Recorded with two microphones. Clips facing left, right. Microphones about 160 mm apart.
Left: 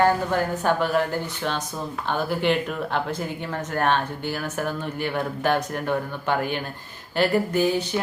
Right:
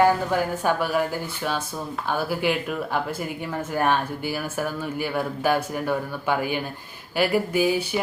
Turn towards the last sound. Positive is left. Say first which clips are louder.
# even
turn(degrees=-10)  # may be behind; listen again after turning